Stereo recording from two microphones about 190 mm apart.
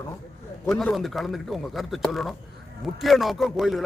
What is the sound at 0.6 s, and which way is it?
A man's voice, centre (ahead or behind).